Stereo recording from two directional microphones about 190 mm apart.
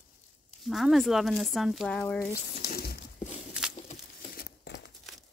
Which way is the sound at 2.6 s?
55° left (ahead or behind).